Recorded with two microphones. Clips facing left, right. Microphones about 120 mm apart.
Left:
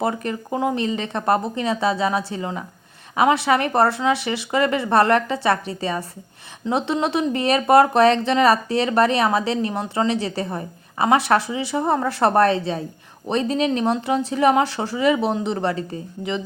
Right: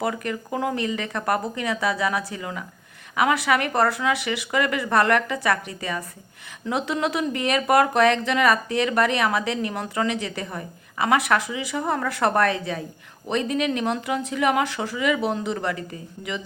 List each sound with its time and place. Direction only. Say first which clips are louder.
0.0 s speech: left 3 dB; 30° left (ahead or behind)